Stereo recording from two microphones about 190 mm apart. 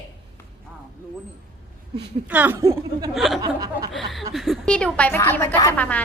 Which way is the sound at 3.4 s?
20° right (ahead or behind).